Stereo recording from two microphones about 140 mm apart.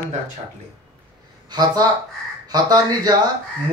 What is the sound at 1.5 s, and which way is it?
Speech, 30° right (ahead or behind).